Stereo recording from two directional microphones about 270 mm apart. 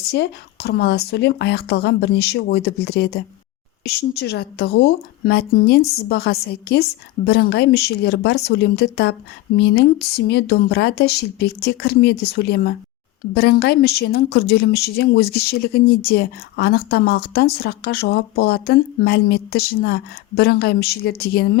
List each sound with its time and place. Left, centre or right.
0.1 s a woman's voice: left